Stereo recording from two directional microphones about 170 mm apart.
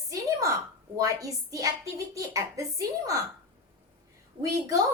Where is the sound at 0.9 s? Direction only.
20° right (ahead or behind).